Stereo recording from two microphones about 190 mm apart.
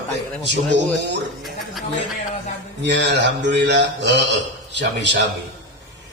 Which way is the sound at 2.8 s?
70° right (ahead or behind).